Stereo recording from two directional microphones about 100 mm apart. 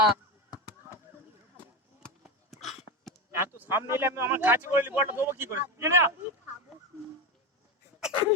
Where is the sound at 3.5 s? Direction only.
20° right (ahead or behind).